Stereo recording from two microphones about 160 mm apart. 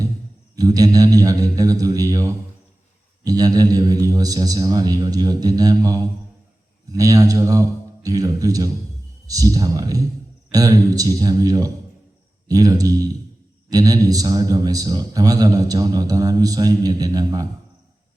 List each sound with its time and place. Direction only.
0.5 s a man's voice: 20° right (ahead or behind)